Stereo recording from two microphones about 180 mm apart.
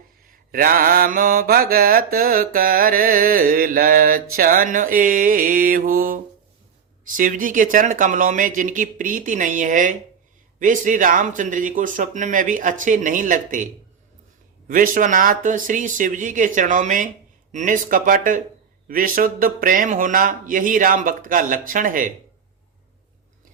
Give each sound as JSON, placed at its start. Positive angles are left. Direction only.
{"t": 0.5, "sound": "mantra", "side_deg": -55}
{"t": 7.2, "sound": "mantra", "side_deg": -50}
{"t": 14.7, "sound": "mantra", "side_deg": -50}